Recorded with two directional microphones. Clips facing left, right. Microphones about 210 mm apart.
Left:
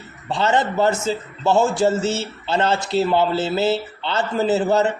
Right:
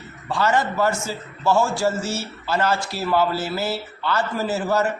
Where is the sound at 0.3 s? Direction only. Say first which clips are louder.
Left 2 dB; 25° left (ahead or behind).